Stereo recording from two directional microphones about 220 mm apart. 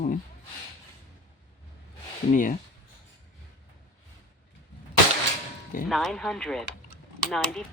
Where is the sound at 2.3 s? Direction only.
35° left (ahead or behind).